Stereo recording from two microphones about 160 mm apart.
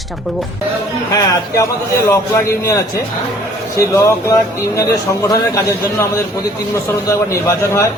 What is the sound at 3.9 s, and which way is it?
A man's voice, 20° left (ahead or behind).